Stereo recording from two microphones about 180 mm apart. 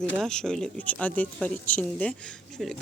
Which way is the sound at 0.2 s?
5° left (ahead or behind).